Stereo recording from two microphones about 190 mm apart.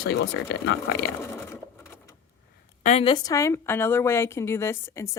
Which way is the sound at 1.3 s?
15° left (ahead or behind).